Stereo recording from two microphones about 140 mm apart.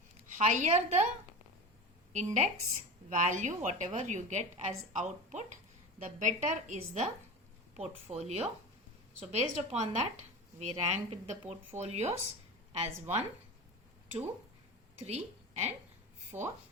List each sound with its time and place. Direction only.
0.3 s a woman's voice: 60° right (ahead or behind)
2.1 s a woman's voice: 55° right (ahead or behind)
15.0 s a woman's voice: 50° right (ahead or behind)
16.3 s speech: 15° right (ahead or behind)